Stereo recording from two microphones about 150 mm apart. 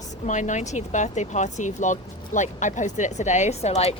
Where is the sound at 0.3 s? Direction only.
55° left (ahead or behind).